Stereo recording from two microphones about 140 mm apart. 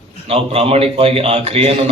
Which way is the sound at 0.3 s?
45° right (ahead or behind).